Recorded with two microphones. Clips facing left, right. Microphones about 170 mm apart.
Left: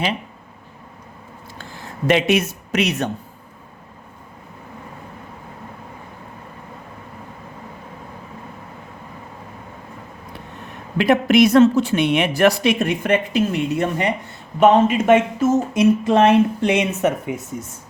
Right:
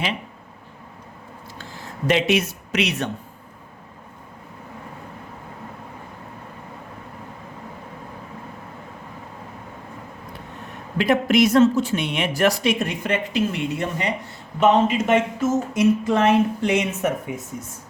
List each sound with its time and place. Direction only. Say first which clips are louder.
2.0 s speech: left 3 dB; 55° left (ahead or behind)
10.9 s speech: left 3 dB; 65° left (ahead or behind)